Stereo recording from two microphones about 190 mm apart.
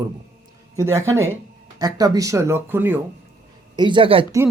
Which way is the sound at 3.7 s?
25° right (ahead or behind).